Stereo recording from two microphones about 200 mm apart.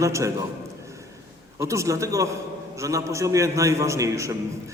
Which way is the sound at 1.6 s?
15° right (ahead or behind).